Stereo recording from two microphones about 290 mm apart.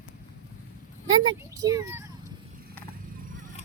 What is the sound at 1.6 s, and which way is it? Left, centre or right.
Speech, centre.